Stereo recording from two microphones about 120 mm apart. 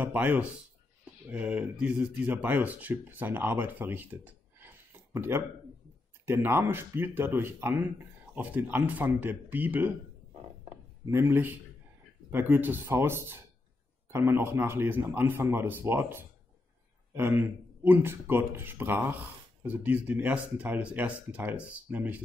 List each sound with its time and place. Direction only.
0.0 s speech: 15° right (ahead or behind)
11.1 s speech: 20° right (ahead or behind)